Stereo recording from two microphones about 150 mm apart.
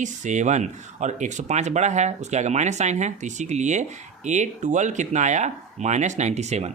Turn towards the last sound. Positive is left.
turn(degrees=-50)  # may be behind; listen again after turning